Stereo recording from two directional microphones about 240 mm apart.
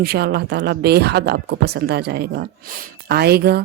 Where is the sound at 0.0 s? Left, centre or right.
Right.